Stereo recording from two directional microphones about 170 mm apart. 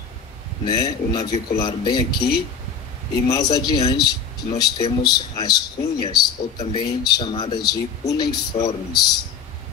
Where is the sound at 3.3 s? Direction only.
20° left (ahead or behind).